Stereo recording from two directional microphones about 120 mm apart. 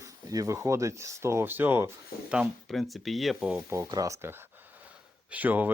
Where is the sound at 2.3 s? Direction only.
Centre (ahead or behind).